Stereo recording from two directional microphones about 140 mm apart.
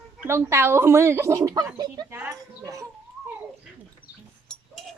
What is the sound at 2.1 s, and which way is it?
Speech, 15° right (ahead or behind).